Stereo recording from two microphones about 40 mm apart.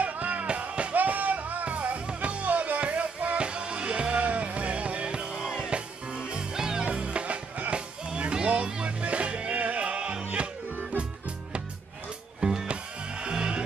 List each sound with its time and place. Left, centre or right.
0.0 s music: right
0.9 s music: right
5.4 s music: centre
5.7 s music: right
6.9 s music: right
7.7 s music: right
12.4 s music: centre